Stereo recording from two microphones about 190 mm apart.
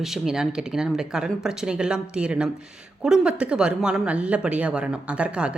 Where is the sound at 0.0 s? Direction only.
Centre (ahead or behind).